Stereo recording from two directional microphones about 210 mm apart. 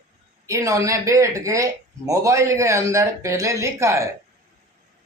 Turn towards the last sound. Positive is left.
turn(degrees=-15)  # may be behind; listen again after turning